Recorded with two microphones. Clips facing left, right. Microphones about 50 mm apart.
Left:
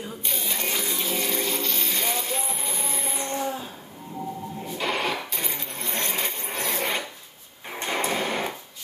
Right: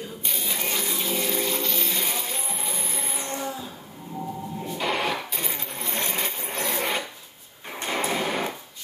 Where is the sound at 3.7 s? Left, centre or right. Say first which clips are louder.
Right 1 dB; centre.